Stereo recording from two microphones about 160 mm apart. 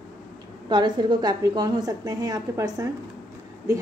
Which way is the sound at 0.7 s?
25° right (ahead or behind).